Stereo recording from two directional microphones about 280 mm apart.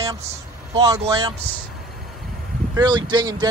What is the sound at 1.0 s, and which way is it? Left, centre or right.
Speech, centre.